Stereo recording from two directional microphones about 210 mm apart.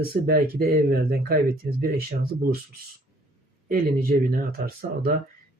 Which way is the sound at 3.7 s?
45° right (ahead or behind).